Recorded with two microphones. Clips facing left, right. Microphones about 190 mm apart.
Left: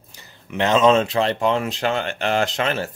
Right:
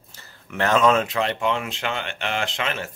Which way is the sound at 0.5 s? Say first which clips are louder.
Left 3 dB; 20° left (ahead or behind).